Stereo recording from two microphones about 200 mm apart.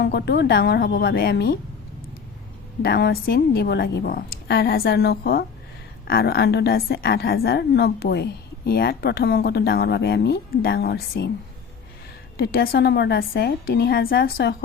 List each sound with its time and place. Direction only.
0.0 s a woman's voice: 55° left (ahead or behind)
2.8 s a woman's voice: 50° left (ahead or behind)
12.4 s a woman's voice: 50° left (ahead or behind)